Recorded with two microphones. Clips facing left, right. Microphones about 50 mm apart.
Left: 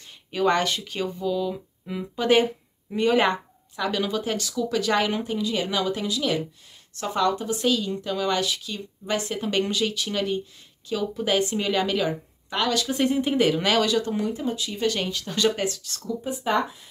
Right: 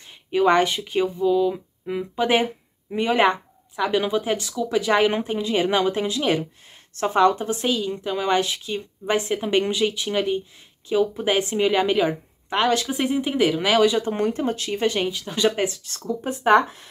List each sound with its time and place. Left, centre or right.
0.3 s speech: centre
12.8 s speech: centre
13.8 s speech: right
14.1 s speech: right
14.8 s speech: right
15.0 s speech: centre; by 16.2 s right
16.3 s speech: right